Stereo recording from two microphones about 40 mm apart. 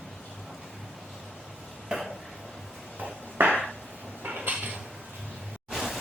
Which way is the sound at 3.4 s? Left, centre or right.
Right.